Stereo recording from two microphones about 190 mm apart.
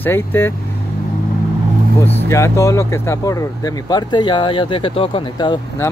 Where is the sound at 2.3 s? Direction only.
15° left (ahead or behind).